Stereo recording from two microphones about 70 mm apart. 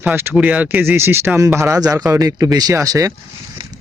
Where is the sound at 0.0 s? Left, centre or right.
Right.